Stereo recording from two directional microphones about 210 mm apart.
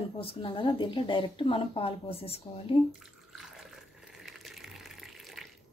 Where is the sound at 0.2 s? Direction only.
25° left (ahead or behind).